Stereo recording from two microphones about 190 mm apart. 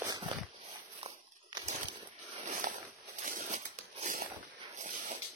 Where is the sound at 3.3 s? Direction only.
45° right (ahead or behind).